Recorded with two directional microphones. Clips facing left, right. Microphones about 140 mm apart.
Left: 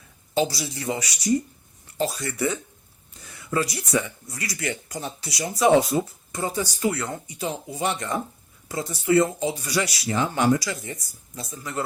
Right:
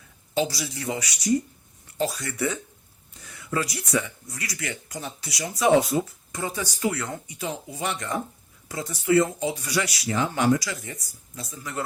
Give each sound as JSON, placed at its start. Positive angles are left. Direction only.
{"t": 0.3, "sound": "speech", "side_deg": 30}
{"t": 3.5, "sound": "speech", "side_deg": 30}